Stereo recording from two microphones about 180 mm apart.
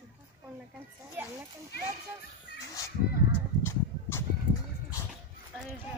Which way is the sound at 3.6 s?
15° left (ahead or behind).